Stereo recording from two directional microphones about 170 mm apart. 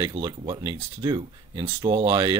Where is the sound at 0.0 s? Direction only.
25° right (ahead or behind).